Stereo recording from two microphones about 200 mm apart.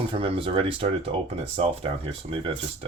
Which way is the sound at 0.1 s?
25° right (ahead or behind).